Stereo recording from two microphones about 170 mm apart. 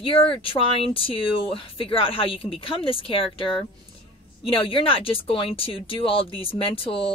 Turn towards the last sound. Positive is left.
turn(degrees=30)  # may be behind; listen again after turning